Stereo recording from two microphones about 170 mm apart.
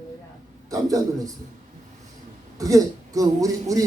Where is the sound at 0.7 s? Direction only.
20° right (ahead or behind).